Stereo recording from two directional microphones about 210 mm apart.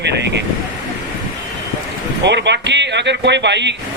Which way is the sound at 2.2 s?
55° right (ahead or behind).